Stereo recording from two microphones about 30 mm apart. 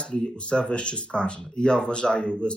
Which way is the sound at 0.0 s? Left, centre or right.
Left.